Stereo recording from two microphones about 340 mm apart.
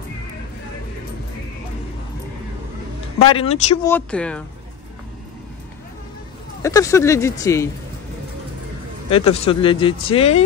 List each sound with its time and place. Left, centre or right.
3.2 s speech: centre
3.8 s speech: centre
6.6 s speech: centre
9.1 s speech: centre